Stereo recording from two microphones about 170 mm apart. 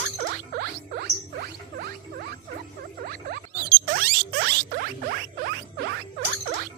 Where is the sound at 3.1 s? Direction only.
60° right (ahead or behind).